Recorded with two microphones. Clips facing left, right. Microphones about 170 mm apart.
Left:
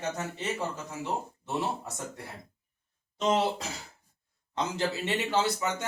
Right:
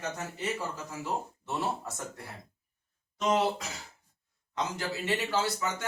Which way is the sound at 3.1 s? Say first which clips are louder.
Left 1 dB; 25° left (ahead or behind).